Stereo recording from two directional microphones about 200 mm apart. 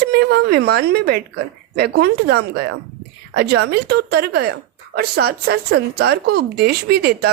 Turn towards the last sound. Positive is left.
turn(degrees=-50)  # may be behind; listen again after turning